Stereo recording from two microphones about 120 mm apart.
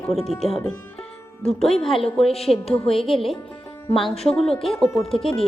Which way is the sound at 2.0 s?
55° left (ahead or behind).